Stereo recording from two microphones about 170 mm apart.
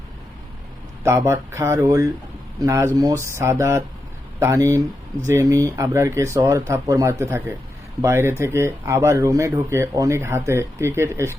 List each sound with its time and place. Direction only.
1.0 s speech: 15° right (ahead or behind)